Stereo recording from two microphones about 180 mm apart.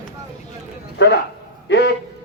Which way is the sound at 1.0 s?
75° left (ahead or behind).